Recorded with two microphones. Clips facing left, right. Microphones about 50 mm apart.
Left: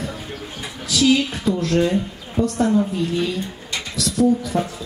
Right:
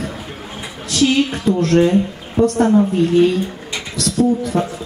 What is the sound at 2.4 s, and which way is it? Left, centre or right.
Speech, right.